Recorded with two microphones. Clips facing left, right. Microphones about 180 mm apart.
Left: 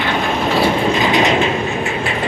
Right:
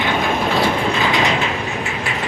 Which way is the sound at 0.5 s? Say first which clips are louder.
Left 3 dB; 15° left (ahead or behind).